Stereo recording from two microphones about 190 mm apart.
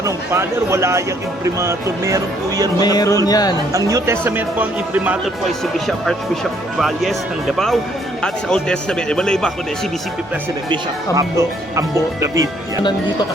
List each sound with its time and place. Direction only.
0.0 s speech: 15° right (ahead or behind)
2.8 s speech: 20° left (ahead or behind)
3.7 s speech: 15° right (ahead or behind); by 9.5 s 5° left (ahead or behind)
10.7 s speech: 20° right (ahead or behind)